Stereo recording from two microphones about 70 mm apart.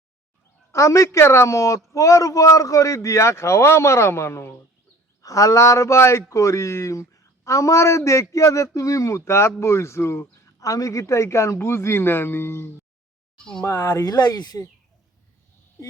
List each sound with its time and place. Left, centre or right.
0.7 s speech: left
5.2 s speech: left
13.4 s speech: centre
13.7 s speech: left